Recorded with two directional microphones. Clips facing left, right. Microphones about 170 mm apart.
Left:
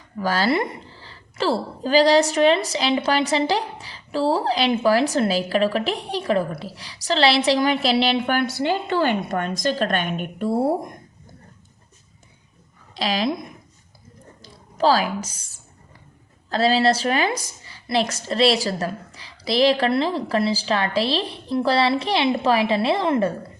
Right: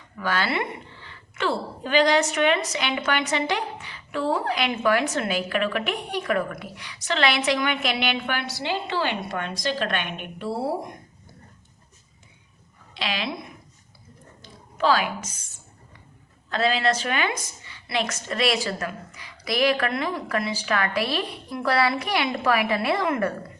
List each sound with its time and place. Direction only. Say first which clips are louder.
0.2 s a woman's voice: left 5 dB; 35° left (ahead or behind)
8.4 s a woman's voice: left 7 dB; 50° left (ahead or behind)
12.9 s a woman's voice: left 7 dB; 40° left (ahead or behind)
14.4 s a woman's voice: left 3 dB; 35° left (ahead or behind)
16.5 s a woman's voice: left 5 dB; 35° left (ahead or behind)